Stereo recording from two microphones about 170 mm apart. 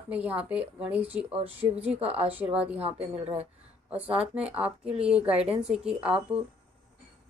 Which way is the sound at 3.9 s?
10° right (ahead or behind).